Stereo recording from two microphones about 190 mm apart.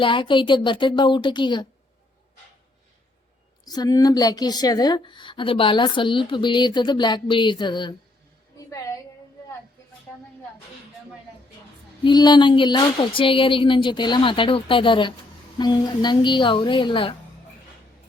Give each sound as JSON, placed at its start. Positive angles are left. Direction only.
{"t": 0.0, "sound": "a woman's voice", "side_deg": 25}
{"t": 3.7, "sound": "a woman's voice", "side_deg": 20}
{"t": 12.0, "sound": "a woman's voice", "side_deg": 20}